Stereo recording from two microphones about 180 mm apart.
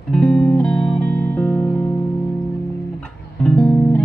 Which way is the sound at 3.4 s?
5° left (ahead or behind).